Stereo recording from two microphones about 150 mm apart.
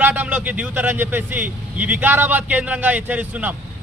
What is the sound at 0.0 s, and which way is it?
A man's voice, 10° right (ahead or behind).